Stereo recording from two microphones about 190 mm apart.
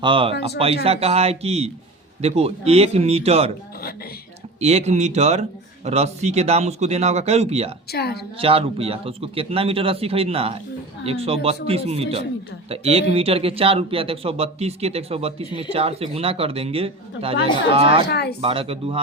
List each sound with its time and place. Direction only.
0.0 s a man's voice: 25° right (ahead or behind)
4.6 s speech: 35° right (ahead or behind)
7.9 s a woman's voice: 55° left (ahead or behind)
8.4 s a man's voice: 30° right (ahead or behind)
18.1 s a woman's voice: 60° left (ahead or behind)
18.4 s a man's voice: 30° right (ahead or behind)